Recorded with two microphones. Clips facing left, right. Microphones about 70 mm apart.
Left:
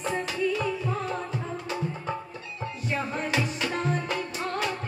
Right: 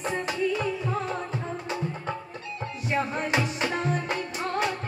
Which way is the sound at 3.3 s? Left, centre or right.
Right.